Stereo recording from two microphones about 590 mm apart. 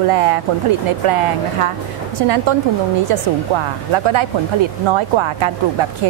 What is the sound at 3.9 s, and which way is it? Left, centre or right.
A woman's voice, right.